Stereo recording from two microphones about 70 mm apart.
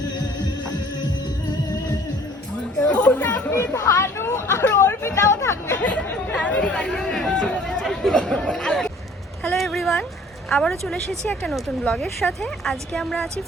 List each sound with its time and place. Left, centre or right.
2.8 s chatter: centre
3.8 s hubbub: left
4.7 s a sound: left
5.8 s chatter: centre
9.5 s a sound: centre
10.5 s a woman's voice: centre